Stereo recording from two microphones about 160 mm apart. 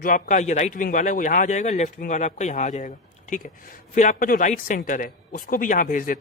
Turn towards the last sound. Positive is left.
turn(degrees=60)  # may be behind; listen again after turning